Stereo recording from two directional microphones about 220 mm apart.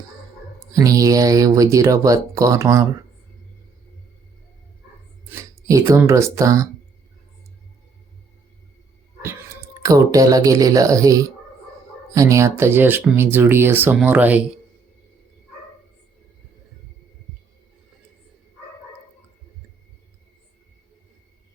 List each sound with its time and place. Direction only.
0.7 s speech: 15° right (ahead or behind)
5.3 s speech: 15° right (ahead or behind)
9.8 s speech: 15° right (ahead or behind)